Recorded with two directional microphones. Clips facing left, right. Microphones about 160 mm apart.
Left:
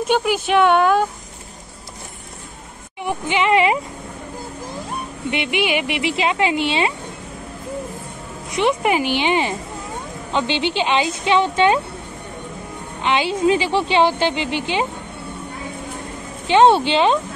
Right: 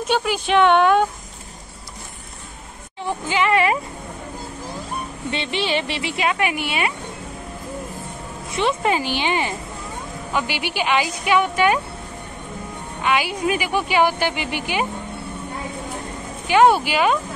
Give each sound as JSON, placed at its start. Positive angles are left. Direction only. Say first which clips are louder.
{"t": 0.1, "sound": "speech", "louder": "left 1 dB", "side_deg": 10}
{"t": 3.0, "sound": "a woman's voice", "louder": "left 1 dB", "side_deg": 15}
{"t": 5.3, "sound": "a woman's voice", "louder": "left 3 dB", "side_deg": 15}
{"t": 8.5, "sound": "a woman's voice", "louder": "left 2 dB", "side_deg": 15}
{"t": 13.0, "sound": "a woman's voice", "louder": "left 3 dB", "side_deg": 25}
{"t": 16.4, "sound": "a woman's voice", "louder": "left 2 dB", "side_deg": 25}